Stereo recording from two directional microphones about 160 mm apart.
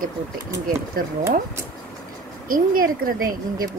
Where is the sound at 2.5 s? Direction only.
60° right (ahead or behind).